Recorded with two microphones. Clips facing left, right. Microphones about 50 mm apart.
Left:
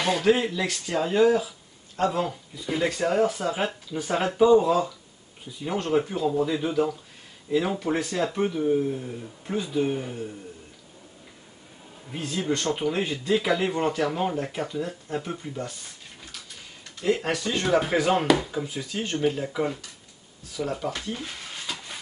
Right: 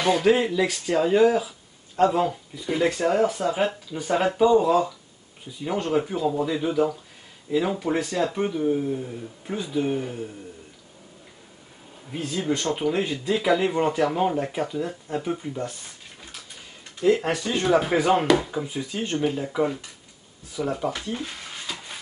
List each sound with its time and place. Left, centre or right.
0.0 s speech: centre
12.1 s speech: centre
17.1 s speech: centre
21.2 s a sound: centre